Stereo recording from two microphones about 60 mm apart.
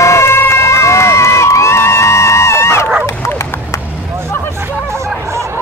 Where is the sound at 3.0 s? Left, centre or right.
Left.